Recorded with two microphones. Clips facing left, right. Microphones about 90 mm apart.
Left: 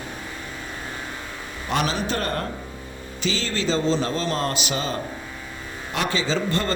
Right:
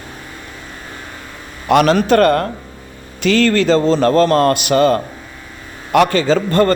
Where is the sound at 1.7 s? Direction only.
70° right (ahead or behind).